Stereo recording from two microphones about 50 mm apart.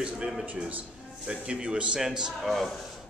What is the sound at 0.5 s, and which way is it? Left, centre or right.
A man's voice, right.